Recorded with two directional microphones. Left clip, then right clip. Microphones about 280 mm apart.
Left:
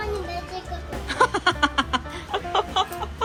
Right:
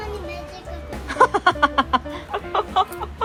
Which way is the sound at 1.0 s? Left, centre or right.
Centre.